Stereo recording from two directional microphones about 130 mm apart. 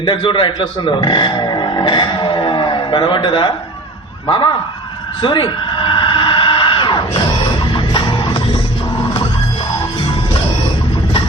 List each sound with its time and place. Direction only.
0.0 s speech: 40° left (ahead or behind)
5.2 s music: 40° left (ahead or behind)